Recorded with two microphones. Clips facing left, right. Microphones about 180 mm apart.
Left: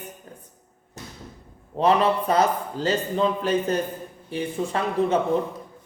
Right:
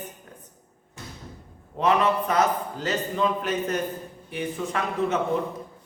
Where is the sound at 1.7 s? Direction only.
30° left (ahead or behind).